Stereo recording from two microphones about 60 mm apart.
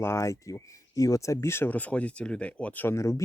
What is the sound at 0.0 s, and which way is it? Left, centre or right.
Speech, left.